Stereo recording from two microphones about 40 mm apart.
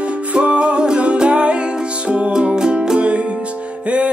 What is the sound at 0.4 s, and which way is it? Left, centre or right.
Music, right.